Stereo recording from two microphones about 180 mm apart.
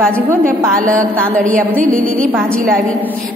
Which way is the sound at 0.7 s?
5° left (ahead or behind).